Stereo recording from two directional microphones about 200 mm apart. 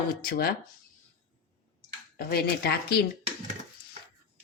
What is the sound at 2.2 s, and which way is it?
Speech, 50° left (ahead or behind).